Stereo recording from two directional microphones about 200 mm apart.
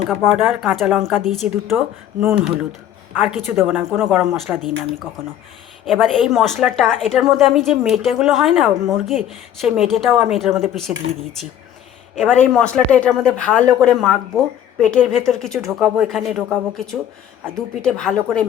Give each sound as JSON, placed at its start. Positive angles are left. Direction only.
{"t": 0.3, "sound": "a woman's voice", "side_deg": 0}
{"t": 5.8, "sound": "a woman's voice", "side_deg": 0}
{"t": 11.0, "sound": "speech", "side_deg": -70}
{"t": 12.1, "sound": "a woman's voice", "side_deg": 5}